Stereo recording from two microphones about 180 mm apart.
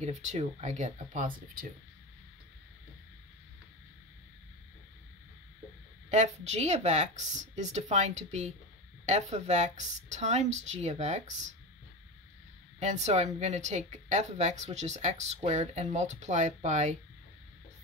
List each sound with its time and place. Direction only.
0.0 s a woman's voice: 40° right (ahead or behind)
6.0 s a woman's voice: 40° right (ahead or behind)
12.7 s a woman's voice: 40° right (ahead or behind)